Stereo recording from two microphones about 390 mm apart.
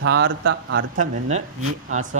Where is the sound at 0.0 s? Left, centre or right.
Right.